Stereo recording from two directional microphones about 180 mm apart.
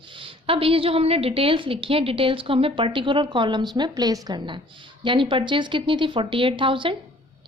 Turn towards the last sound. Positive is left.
turn(degrees=-30)  # may be behind; listen again after turning